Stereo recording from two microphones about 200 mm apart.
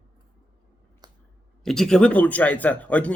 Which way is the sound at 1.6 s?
Centre (ahead or behind).